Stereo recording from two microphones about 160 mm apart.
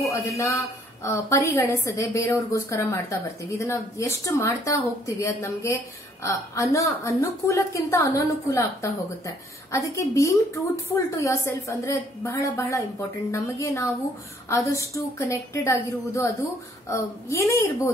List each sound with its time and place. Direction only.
0.1 s a woman's voice: 20° left (ahead or behind)